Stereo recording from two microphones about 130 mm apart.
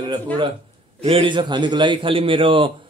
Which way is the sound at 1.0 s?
40° right (ahead or behind).